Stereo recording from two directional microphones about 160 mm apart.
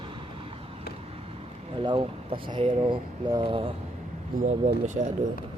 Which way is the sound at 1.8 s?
30° right (ahead or behind).